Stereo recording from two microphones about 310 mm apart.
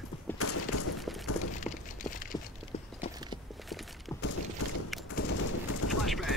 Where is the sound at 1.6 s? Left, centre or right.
Left.